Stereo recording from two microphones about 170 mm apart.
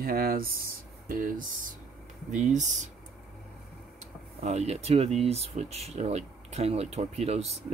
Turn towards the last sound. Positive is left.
turn(degrees=-40)  # may be behind; listen again after turning